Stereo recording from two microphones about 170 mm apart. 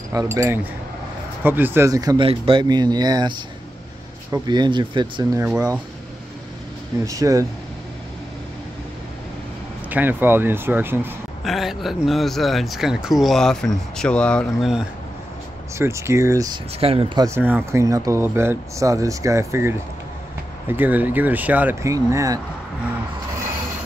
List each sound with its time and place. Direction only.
0.1 s speech: 20° right (ahead or behind)
2.2 s speech: 35° right (ahead or behind)
7.1 s speech: 20° right (ahead or behind)
9.8 s speech: 10° right (ahead or behind)
11.4 s speech: centre (ahead or behind)
15.8 s speech: 15° right (ahead or behind)
16.8 s speech: 35° right (ahead or behind)
17.3 s speech: 10° right (ahead or behind)